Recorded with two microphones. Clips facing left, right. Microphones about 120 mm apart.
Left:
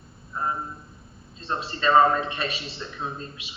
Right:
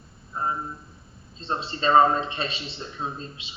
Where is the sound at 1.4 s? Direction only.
25° right (ahead or behind).